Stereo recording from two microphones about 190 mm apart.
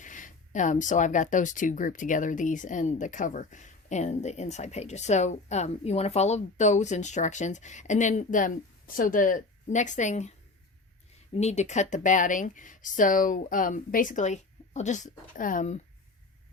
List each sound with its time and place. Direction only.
0.0 s speech: 45° left (ahead or behind)
11.3 s speech: 35° left (ahead or behind)